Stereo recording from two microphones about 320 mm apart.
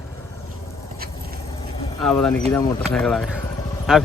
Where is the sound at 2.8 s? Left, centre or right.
Centre.